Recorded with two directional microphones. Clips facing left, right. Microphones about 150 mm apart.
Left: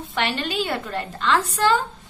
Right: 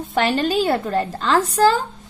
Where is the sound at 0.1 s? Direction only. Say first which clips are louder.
Right 7 dB; 40° right (ahead or behind).